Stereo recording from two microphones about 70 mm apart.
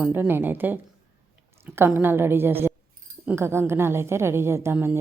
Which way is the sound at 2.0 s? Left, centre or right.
Right.